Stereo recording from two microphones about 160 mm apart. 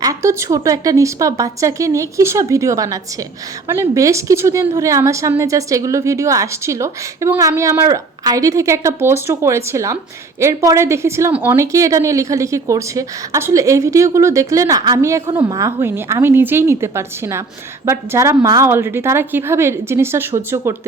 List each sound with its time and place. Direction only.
0.0 s a woman's voice: 20° right (ahead or behind)